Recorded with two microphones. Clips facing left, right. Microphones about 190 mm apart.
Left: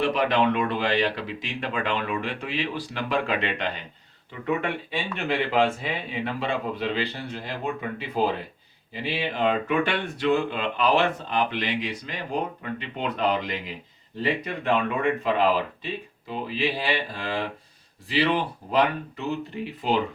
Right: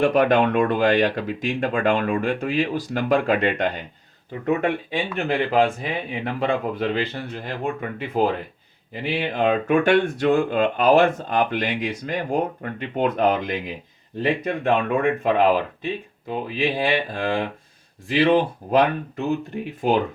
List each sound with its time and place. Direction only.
0.0 s speech: 50° right (ahead or behind)